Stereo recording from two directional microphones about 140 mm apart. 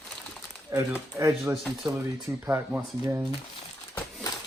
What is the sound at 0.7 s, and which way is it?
Speech, 25° right (ahead or behind).